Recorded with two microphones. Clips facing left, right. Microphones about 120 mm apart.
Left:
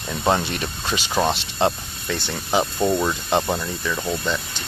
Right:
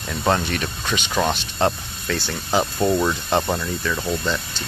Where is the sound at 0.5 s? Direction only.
30° left (ahead or behind).